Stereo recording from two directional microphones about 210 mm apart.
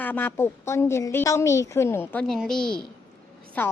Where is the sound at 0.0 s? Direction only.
10° left (ahead or behind).